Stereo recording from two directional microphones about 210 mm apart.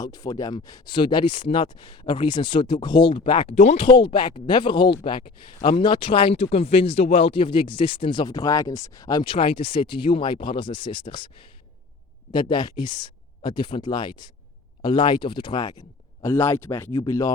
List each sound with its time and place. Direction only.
0.0 s speech: 15° left (ahead or behind)
12.3 s speech: 20° left (ahead or behind)